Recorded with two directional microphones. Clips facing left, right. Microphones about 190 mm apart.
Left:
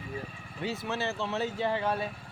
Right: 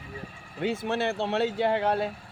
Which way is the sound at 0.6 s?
50° right (ahead or behind).